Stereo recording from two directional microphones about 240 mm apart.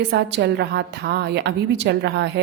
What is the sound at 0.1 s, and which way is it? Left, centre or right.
A woman's voice, right.